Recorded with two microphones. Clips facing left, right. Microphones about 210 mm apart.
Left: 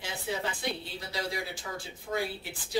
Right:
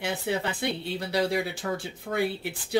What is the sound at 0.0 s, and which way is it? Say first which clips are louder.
Speech: right 6 dB; 65° right (ahead or behind).